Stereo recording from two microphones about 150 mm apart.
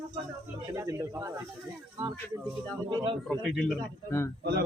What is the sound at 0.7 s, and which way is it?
Speech, 20° right (ahead or behind).